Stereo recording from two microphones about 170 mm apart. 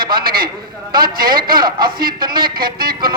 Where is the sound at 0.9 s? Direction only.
60° right (ahead or behind).